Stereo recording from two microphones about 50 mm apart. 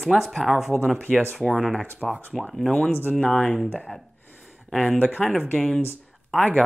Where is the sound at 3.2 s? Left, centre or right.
Left.